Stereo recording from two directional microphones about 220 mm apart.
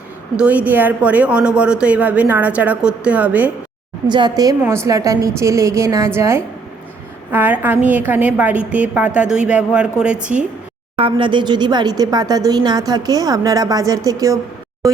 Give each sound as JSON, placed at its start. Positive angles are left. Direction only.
{"t": 0.3, "sound": "speech", "side_deg": -5}
{"t": 4.1, "sound": "a woman's voice", "side_deg": -20}
{"t": 10.9, "sound": "speech", "side_deg": -25}